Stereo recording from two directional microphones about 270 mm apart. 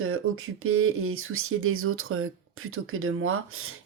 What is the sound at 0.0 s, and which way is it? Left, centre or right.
Speech, right.